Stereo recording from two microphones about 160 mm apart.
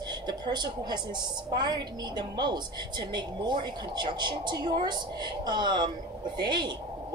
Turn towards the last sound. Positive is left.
turn(degrees=-30)  # may be behind; listen again after turning